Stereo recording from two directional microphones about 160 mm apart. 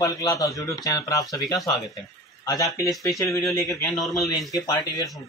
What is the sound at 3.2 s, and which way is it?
Speech, 20° left (ahead or behind).